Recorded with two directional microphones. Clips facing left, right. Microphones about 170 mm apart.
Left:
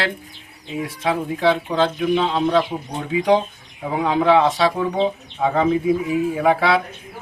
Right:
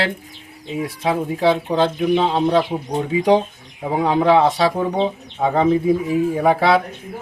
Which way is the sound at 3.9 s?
35° right (ahead or behind).